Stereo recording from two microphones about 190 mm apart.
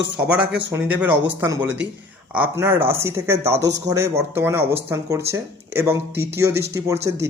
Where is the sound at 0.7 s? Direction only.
10° right (ahead or behind).